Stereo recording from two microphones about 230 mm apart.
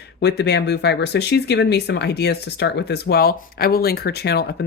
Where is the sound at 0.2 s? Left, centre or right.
Left.